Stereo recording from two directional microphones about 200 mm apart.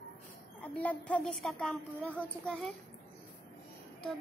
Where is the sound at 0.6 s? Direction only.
5° left (ahead or behind).